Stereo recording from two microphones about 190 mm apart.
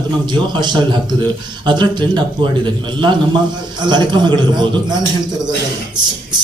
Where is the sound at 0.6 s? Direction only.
25° right (ahead or behind).